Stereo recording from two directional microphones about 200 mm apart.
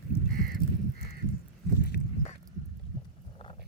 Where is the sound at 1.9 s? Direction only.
55° left (ahead or behind).